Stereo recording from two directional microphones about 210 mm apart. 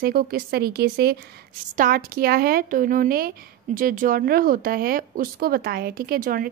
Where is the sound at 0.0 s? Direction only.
45° right (ahead or behind).